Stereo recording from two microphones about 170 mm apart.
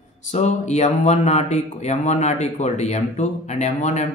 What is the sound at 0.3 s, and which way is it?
Speech, 40° left (ahead or behind).